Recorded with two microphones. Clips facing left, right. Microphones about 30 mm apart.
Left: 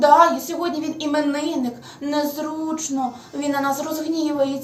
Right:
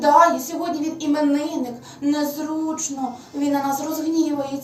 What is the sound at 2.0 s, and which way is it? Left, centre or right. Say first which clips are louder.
A woman's voice: right 1 dB; centre.